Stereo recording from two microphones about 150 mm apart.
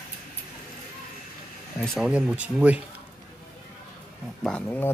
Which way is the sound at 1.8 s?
5° left (ahead or behind).